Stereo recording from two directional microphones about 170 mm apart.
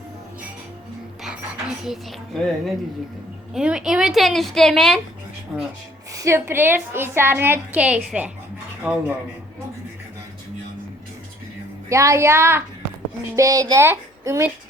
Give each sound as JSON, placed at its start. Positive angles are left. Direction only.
{"t": 1.2, "sound": "a woman's voice", "side_deg": -5}
{"t": 6.1, "sound": "a woman's voice", "side_deg": -15}
{"t": 11.9, "sound": "a woman's voice", "side_deg": -15}